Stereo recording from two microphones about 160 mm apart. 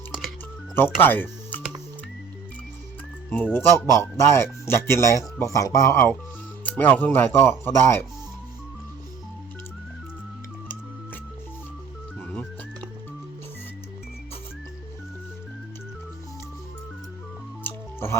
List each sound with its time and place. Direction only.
0.8 s music: 15° left (ahead or behind)
3.2 s speech: 10° left (ahead or behind)
12.2 s music: 10° left (ahead or behind)
17.6 s music: 15° left (ahead or behind)